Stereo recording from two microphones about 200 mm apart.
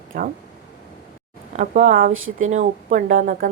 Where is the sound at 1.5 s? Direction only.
40° right (ahead or behind).